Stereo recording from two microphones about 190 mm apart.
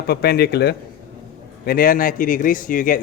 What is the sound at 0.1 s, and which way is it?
A man's voice, 55° left (ahead or behind).